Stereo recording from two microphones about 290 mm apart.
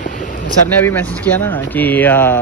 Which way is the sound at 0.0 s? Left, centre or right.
Left.